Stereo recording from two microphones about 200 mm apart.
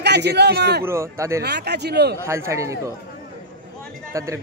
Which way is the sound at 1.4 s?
55° right (ahead or behind).